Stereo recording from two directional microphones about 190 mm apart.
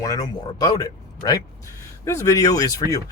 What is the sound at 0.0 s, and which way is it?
Speech, 20° left (ahead or behind).